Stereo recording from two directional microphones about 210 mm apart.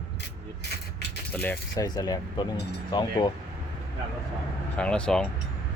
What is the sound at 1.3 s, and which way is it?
A man's voice, 10° left (ahead or behind).